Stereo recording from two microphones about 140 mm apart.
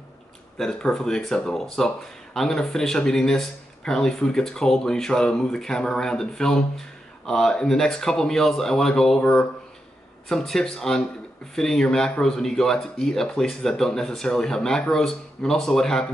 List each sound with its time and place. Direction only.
0.6 s speech: 5° left (ahead or behind)